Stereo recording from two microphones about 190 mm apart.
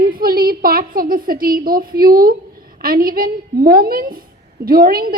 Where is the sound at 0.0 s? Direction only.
50° right (ahead or behind).